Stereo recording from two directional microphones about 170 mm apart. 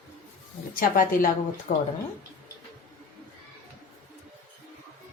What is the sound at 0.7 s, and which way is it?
A woman's voice, 55° left (ahead or behind).